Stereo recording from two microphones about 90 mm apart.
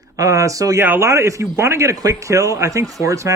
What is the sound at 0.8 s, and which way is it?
Speech, 25° right (ahead or behind).